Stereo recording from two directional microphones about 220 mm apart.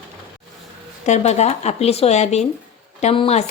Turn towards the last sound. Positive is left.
turn(degrees=30)  # may be behind; listen again after turning